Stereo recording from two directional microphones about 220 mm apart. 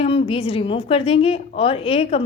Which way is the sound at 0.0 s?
25° left (ahead or behind).